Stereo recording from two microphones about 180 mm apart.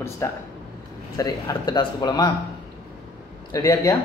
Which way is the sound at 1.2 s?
20° left (ahead or behind).